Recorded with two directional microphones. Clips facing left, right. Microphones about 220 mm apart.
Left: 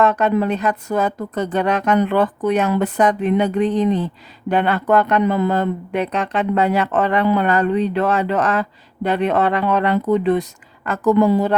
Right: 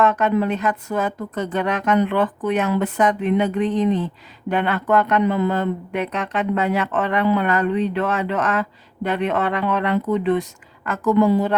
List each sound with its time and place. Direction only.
0.0 s speech: 35° left (ahead or behind)